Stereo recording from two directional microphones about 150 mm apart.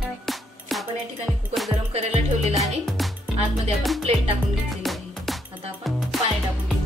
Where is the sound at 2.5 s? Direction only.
Centre (ahead or behind).